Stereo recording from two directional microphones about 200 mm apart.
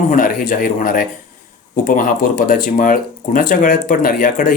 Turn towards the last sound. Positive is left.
turn(degrees=40)  # may be behind; listen again after turning